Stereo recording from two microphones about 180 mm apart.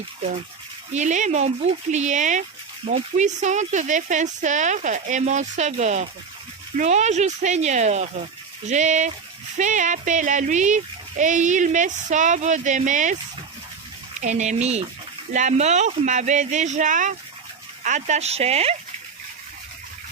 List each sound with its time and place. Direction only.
0.9 s speech: 40° right (ahead or behind)
14.2 s speech: 40° right (ahead or behind)